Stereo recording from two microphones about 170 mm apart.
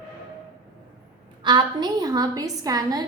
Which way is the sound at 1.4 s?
25° right (ahead or behind).